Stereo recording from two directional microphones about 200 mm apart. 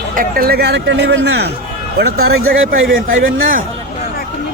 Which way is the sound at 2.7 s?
45° right (ahead or behind).